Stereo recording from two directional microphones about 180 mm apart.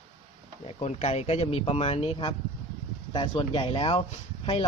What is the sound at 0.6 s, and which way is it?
Speech, 35° left (ahead or behind).